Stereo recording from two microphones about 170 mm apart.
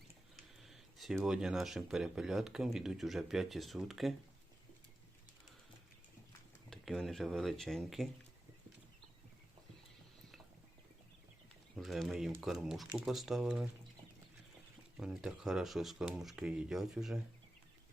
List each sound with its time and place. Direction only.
0.3 s speech: centre (ahead or behind)
6.7 s speech: centre (ahead or behind)
11.8 s speech: centre (ahead or behind)
14.9 s speech: 5° right (ahead or behind)